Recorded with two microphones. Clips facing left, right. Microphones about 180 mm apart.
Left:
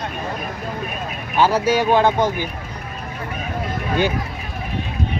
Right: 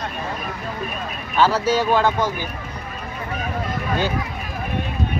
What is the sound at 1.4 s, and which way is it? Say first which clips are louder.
Speech: left 1 dB; 15° left (ahead or behind).